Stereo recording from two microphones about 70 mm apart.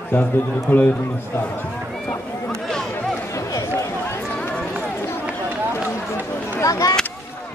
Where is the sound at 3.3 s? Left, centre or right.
Left.